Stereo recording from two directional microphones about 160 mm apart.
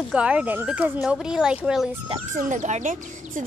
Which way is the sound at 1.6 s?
5° right (ahead or behind).